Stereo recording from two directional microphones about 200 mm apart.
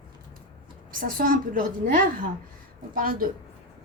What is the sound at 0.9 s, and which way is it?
Speech, 45° right (ahead or behind).